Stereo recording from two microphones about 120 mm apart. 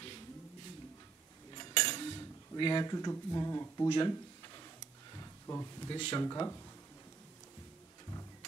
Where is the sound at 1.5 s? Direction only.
35° left (ahead or behind).